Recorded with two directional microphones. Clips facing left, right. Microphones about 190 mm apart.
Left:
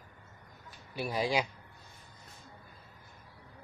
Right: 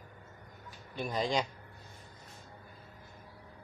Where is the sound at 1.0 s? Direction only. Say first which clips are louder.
Left 1 dB; 10° left (ahead or behind).